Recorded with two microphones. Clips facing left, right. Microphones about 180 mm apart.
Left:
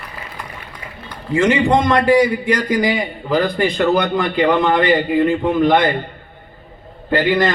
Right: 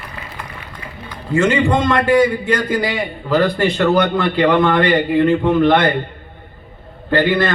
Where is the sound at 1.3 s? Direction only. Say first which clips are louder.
Left 1 dB; 15° left (ahead or behind).